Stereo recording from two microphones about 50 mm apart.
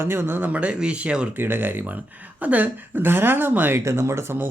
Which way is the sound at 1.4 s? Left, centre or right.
Right.